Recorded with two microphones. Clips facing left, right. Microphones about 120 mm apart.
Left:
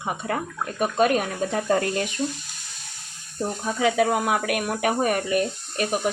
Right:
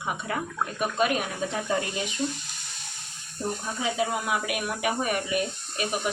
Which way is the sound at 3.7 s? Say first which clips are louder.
Left 8 dB; 70° left (ahead or behind).